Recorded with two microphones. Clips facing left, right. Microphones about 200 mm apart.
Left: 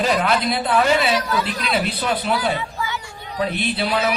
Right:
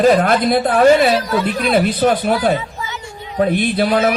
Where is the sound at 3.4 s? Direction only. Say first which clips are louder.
Right 7 dB; 50° right (ahead or behind).